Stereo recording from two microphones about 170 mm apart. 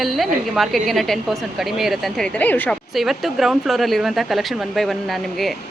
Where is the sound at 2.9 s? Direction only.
Centre (ahead or behind).